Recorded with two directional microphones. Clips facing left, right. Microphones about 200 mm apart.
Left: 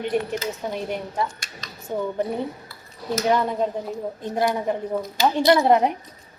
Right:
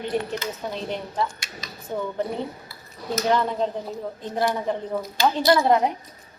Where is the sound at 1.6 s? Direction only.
5° right (ahead or behind).